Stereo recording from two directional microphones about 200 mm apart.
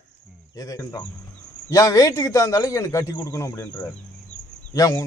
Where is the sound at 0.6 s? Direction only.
15° left (ahead or behind).